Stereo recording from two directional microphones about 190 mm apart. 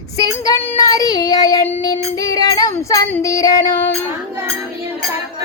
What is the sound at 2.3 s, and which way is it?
Female singing, 20° left (ahead or behind).